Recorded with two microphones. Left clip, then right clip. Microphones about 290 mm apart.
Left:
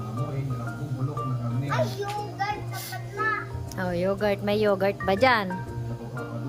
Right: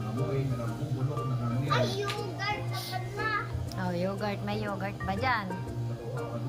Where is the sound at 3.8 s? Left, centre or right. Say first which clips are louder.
Left 7 dB; centre.